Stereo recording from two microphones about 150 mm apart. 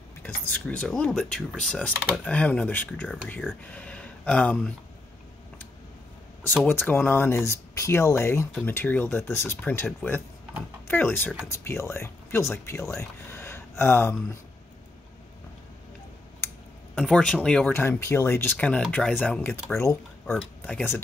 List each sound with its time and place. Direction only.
0.2 s speech: 10° left (ahead or behind)
6.7 s speech: 10° left (ahead or behind)
16.9 s speech: 5° left (ahead or behind)
20.2 s speech: 5° left (ahead or behind)